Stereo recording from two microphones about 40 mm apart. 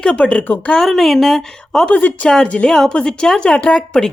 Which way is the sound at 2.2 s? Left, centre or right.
Centre.